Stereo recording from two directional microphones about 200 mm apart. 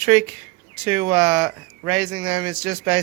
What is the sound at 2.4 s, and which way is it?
Speech, 25° right (ahead or behind).